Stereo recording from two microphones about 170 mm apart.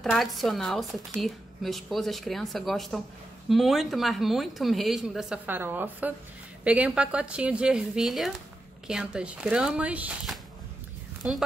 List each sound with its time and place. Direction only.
0.0 s a woman's voice: centre (ahead or behind)